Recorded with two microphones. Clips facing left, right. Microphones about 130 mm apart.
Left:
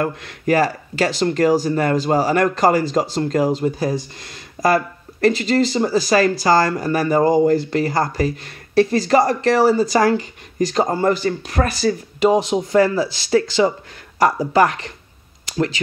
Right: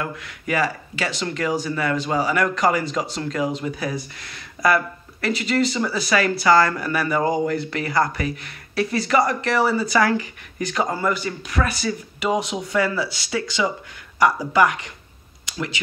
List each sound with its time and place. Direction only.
0.0 s speech: 45° left (ahead or behind)